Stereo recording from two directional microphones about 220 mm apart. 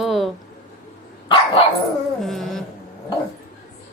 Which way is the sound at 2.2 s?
Centre (ahead or behind).